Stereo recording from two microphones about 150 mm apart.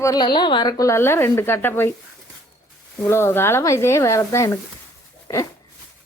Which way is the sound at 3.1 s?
15° left (ahead or behind).